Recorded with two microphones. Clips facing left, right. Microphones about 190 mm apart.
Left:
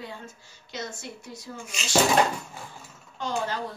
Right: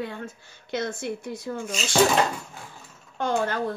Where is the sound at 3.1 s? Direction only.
55° right (ahead or behind).